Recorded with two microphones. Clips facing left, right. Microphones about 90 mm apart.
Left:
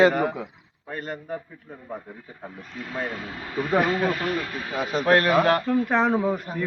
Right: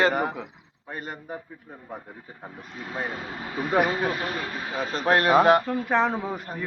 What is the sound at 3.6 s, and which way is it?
Speech, 10° right (ahead or behind).